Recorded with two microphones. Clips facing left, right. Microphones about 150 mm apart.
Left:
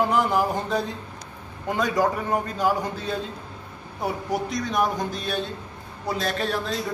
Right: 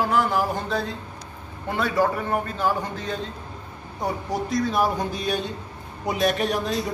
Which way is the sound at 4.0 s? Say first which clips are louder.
Even; centre (ahead or behind).